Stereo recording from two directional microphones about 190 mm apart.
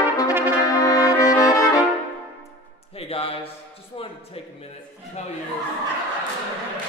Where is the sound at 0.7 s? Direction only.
15° left (ahead or behind).